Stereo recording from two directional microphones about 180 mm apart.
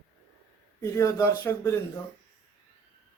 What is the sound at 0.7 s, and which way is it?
Speech, 15° left (ahead or behind).